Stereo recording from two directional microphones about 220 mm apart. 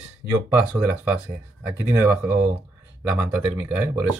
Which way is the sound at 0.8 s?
5° right (ahead or behind).